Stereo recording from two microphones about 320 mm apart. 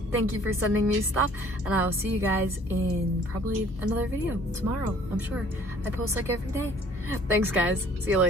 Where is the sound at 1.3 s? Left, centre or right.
Centre.